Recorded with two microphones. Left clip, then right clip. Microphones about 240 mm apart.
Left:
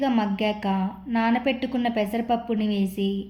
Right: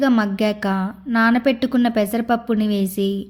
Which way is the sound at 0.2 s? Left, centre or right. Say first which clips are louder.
Right 5 dB; right.